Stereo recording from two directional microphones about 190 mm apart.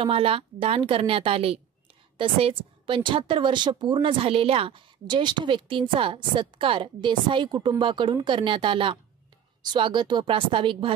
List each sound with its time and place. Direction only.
0.0 s a woman's voice: 30° right (ahead or behind)